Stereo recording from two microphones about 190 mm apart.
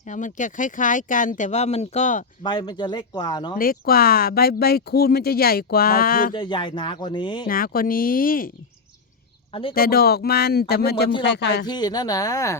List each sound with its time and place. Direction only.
0.1 s speech: 40° left (ahead or behind)
2.4 s speech: 25° left (ahead or behind)
3.6 s speech: 50° left (ahead or behind)
6.3 s speech: 25° left (ahead or behind)
7.4 s speech: 50° left (ahead or behind)
9.5 s speech: 25° left (ahead or behind)
9.7 s speech: 55° left (ahead or behind)
11.7 s speech: 20° left (ahead or behind)